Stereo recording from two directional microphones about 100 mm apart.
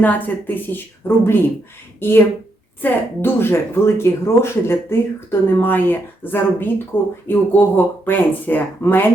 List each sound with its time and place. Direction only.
0.0 s speech: 15° left (ahead or behind)